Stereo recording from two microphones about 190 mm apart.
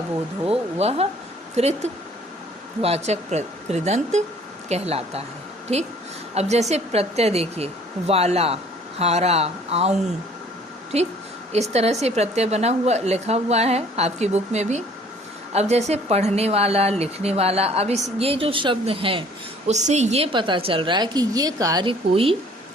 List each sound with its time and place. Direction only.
0.4 s a woman's voice: 30° right (ahead or behind)
10.9 s a woman's voice: 35° right (ahead or behind)